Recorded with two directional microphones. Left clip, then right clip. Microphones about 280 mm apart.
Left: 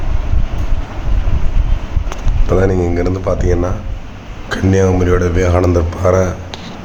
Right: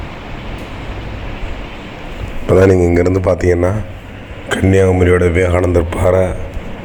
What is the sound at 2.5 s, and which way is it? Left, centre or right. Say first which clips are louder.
A man's voice: right 5 dB; right.